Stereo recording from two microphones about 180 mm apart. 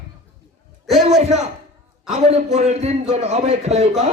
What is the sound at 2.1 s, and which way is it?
A man's voice, 35° right (ahead or behind).